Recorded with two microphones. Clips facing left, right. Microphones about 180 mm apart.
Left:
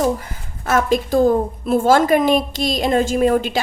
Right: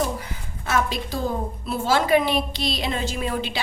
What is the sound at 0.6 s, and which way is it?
A woman's voice, 50° left (ahead or behind).